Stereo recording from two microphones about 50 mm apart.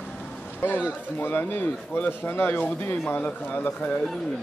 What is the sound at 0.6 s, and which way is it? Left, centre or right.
A man's voice, left.